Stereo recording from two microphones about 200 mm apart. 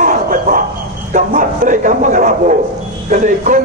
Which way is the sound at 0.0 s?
45° right (ahead or behind).